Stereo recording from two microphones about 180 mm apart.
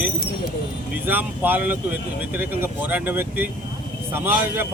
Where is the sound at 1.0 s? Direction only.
10° right (ahead or behind).